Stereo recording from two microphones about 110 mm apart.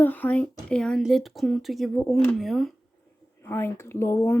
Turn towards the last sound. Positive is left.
turn(degrees=20)  # may be behind; listen again after turning